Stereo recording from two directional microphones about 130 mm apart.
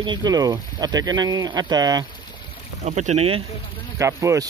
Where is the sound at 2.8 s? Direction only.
60° right (ahead or behind).